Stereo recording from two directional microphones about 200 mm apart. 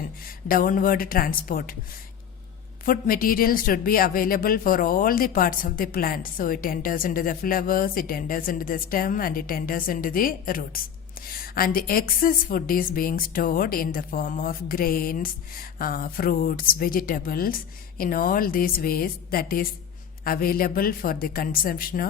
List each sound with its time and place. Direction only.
0.4 s a woman's voice: 45° left (ahead or behind)
2.8 s a woman's voice: 45° left (ahead or behind)